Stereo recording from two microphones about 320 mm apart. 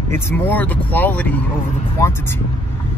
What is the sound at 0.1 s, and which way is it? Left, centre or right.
A man's voice, centre.